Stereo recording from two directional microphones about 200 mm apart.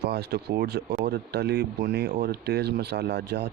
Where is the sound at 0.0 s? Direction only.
55° right (ahead or behind).